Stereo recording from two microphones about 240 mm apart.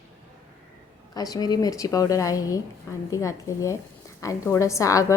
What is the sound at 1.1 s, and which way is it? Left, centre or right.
Speech, centre.